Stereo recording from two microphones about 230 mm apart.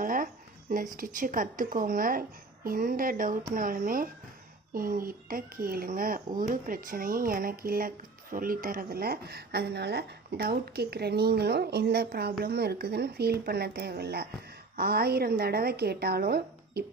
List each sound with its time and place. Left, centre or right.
0.0 s speech: right